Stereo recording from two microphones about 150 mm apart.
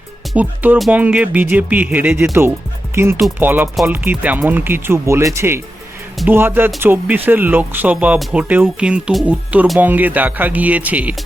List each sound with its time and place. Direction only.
0.3 s speech: 10° right (ahead or behind)